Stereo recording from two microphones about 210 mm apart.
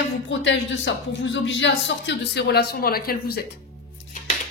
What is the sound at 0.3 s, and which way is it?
Speech, 60° left (ahead or behind).